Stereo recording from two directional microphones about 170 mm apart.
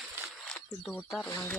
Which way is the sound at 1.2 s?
15° left (ahead or behind).